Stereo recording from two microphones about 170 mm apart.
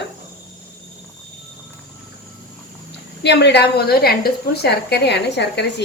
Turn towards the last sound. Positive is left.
turn(degrees=90)